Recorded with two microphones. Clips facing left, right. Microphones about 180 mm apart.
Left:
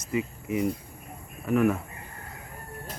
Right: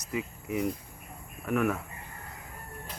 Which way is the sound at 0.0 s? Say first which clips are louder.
Left 5 dB; centre (ahead or behind).